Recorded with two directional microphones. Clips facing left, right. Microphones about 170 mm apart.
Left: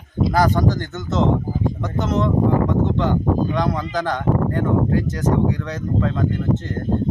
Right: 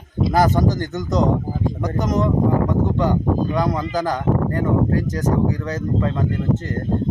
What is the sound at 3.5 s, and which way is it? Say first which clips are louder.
Speech: right 1 dB; 10° right (ahead or behind).